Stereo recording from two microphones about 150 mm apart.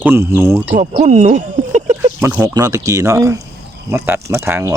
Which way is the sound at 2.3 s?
20° right (ahead or behind).